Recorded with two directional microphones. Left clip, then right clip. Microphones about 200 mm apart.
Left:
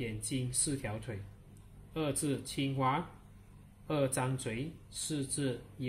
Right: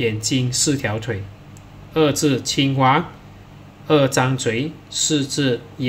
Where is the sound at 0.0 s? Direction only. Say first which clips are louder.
Right 19 dB; 15° right (ahead or behind).